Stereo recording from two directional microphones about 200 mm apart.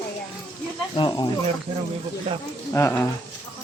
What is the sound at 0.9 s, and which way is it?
Speech, 25° left (ahead or behind).